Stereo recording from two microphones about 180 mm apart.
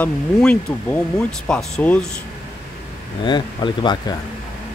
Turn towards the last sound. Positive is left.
turn(degrees=25)  # may be behind; listen again after turning